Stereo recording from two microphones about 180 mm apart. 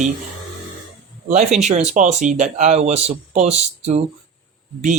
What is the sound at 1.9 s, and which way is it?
Speech, 45° right (ahead or behind).